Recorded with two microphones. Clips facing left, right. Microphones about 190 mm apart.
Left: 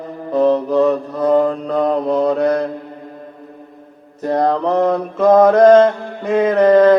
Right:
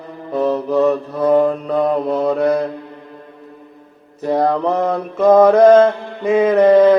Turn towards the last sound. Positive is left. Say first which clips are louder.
# even
turn(degrees=-5)  # may be behind; listen again after turning